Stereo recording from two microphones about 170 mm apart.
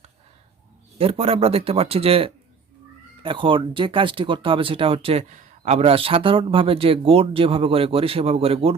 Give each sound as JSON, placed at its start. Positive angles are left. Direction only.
{"t": 0.9, "sound": "speech", "side_deg": -35}